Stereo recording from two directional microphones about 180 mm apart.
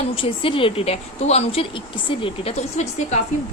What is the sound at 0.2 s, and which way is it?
A woman's voice, 30° left (ahead or behind).